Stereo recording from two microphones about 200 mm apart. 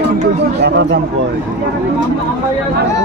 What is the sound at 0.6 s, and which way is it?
Speech, 55° right (ahead or behind).